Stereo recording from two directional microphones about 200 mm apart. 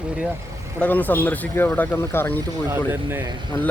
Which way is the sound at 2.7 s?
10° right (ahead or behind).